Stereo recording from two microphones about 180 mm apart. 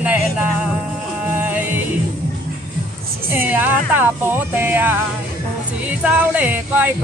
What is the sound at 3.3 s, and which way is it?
Speech, 10° right (ahead or behind).